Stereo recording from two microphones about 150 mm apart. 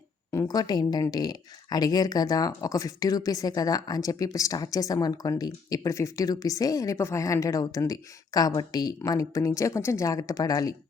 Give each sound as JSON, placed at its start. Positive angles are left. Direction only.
{"t": 0.3, "sound": "speech", "side_deg": 20}